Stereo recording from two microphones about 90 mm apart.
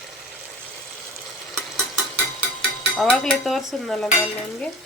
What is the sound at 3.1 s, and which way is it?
Speech, 5° left (ahead or behind).